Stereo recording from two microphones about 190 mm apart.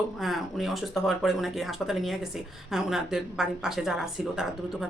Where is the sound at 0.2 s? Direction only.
Centre (ahead or behind).